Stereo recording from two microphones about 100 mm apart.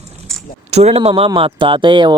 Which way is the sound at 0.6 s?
90° right.